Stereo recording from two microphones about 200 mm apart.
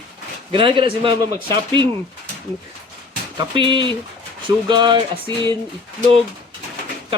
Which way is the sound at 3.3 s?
25° right (ahead or behind).